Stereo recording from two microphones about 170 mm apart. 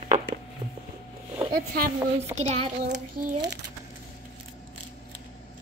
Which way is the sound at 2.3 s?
40° right (ahead or behind).